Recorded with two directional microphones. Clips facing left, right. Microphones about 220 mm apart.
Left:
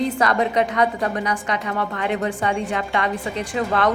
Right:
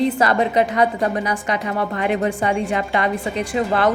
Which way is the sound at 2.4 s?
35° right (ahead or behind).